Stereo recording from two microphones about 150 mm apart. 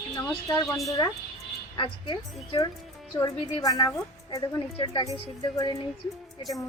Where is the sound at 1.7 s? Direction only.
30° left (ahead or behind).